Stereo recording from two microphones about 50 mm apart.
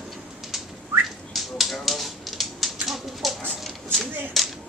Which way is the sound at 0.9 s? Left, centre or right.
Right.